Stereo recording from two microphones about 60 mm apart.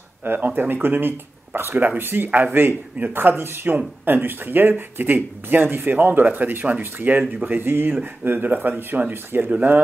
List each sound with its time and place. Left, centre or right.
0.2 s speech: right